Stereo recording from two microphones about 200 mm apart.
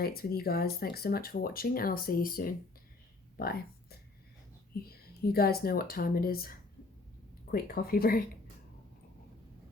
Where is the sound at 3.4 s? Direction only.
50° left (ahead or behind).